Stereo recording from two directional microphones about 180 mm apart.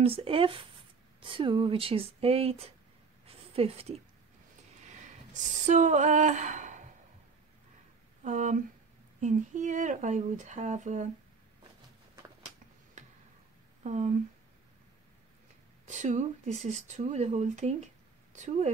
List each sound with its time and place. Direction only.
0.0 s speech: 30° right (ahead or behind)
3.3 s a sound: 35° right (ahead or behind)
4.8 s a sound: 45° right (ahead or behind)
8.2 s speech: 45° right (ahead or behind)
13.8 s speech: 40° right (ahead or behind)
15.8 s speech: 40° right (ahead or behind)